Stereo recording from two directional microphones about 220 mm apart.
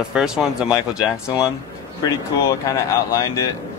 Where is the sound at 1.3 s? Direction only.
15° left (ahead or behind).